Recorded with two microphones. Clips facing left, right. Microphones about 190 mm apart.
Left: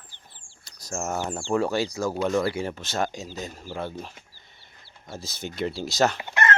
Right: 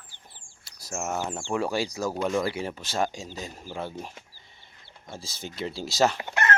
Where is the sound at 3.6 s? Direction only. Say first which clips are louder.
Even; 10° right (ahead or behind).